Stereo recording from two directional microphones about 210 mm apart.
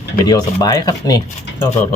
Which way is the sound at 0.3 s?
20° left (ahead or behind).